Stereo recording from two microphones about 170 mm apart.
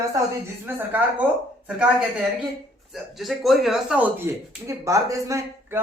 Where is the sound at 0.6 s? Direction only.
10° right (ahead or behind).